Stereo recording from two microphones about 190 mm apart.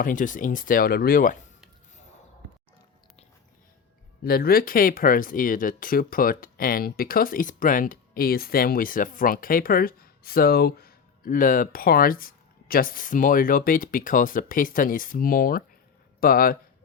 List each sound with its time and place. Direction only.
0.0 s speech: 45° left (ahead or behind)
4.2 s speech: 55° left (ahead or behind)